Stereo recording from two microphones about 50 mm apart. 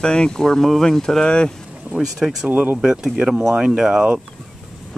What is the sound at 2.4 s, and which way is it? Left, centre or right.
Speech, right.